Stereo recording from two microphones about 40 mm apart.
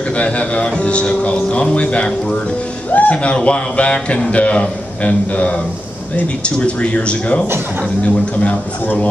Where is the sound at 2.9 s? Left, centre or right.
Left.